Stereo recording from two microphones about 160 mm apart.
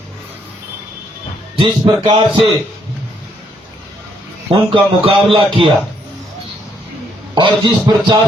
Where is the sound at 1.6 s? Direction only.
30° right (ahead or behind).